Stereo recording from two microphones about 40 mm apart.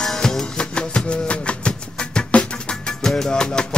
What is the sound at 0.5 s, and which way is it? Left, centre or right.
Music, left.